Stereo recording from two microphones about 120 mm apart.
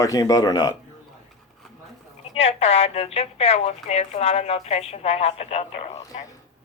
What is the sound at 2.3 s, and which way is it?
A woman's voice, 60° left (ahead or behind).